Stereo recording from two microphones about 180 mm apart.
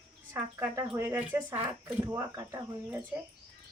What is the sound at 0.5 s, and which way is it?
Speech, 15° right (ahead or behind).